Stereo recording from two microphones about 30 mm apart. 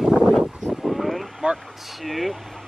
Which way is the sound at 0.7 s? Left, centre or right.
Centre.